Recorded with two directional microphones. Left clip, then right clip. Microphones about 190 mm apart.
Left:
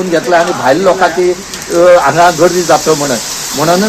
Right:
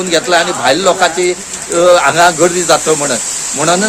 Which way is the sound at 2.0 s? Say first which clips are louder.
Left 2 dB; 25° right (ahead or behind).